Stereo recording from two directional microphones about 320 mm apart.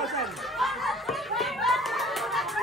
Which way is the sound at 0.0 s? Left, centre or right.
Centre.